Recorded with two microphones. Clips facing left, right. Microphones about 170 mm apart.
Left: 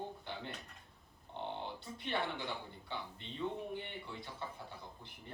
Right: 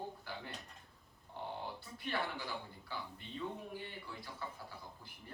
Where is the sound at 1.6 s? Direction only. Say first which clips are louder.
Left 1 dB; 25° left (ahead or behind).